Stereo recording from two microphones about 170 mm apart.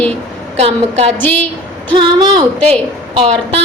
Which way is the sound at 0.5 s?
40° right (ahead or behind).